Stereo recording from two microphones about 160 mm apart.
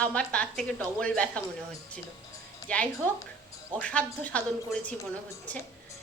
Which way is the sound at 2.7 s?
10° left (ahead or behind).